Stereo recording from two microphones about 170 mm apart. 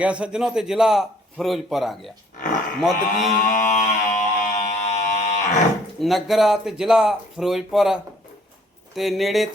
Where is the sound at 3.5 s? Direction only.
45° left (ahead or behind).